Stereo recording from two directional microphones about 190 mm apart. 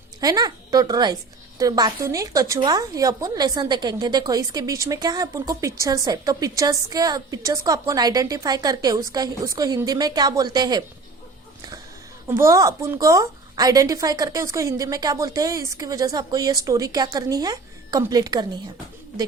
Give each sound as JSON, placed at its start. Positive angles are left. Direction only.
{"t": 0.2, "sound": "a woman's voice", "side_deg": -20}
{"t": 12.3, "sound": "a woman's voice", "side_deg": -15}